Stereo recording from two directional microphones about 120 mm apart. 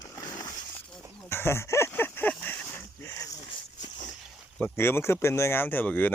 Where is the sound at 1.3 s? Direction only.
20° left (ahead or behind).